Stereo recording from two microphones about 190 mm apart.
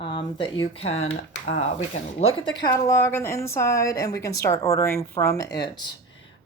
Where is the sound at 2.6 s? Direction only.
20° left (ahead or behind).